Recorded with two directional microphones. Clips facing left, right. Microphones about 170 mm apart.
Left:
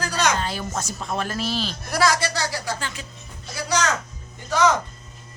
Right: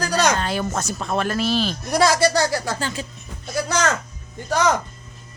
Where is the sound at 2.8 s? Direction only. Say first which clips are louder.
Right 6 dB; 35° right (ahead or behind).